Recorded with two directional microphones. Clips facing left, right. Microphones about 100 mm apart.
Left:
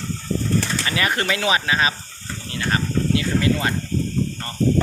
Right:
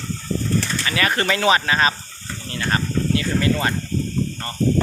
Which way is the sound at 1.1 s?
5° left (ahead or behind).